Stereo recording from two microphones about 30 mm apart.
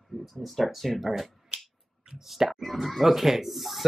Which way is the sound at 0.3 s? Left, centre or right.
Centre.